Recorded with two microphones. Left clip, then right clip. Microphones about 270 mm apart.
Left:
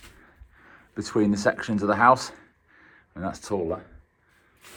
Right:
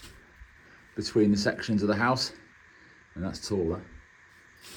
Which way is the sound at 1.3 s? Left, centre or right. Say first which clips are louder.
Left 4 dB; centre.